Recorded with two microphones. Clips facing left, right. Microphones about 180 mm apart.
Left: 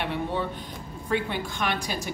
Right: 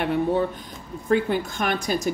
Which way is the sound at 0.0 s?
45° right (ahead or behind).